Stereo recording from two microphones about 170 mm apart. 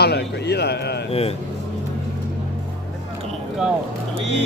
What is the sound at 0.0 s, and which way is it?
A man's voice, 75° left (ahead or behind).